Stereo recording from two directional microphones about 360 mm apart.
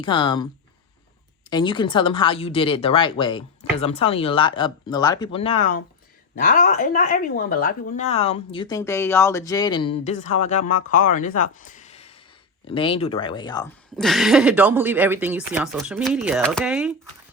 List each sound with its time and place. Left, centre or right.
0.0 s speech: centre
1.5 s speech: centre
13.9 s speech: centre